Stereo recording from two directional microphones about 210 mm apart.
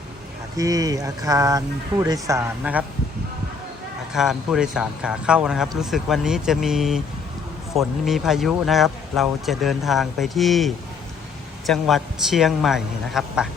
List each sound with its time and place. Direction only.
0.5 s speech: 15° right (ahead or behind)
4.1 s speech: centre (ahead or behind)